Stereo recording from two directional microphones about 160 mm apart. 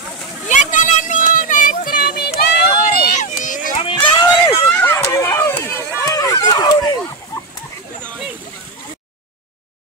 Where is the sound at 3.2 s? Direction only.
50° left (ahead or behind).